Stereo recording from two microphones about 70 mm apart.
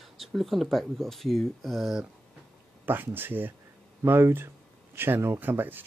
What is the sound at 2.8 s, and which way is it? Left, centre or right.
Speech, right.